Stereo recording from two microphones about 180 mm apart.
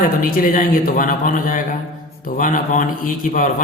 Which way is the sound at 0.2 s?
50° left (ahead or behind).